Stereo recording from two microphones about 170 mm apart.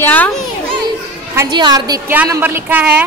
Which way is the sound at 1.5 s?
25° right (ahead or behind).